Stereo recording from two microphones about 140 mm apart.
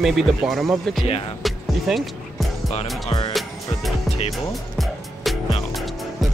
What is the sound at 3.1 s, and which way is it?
Music, 35° left (ahead or behind).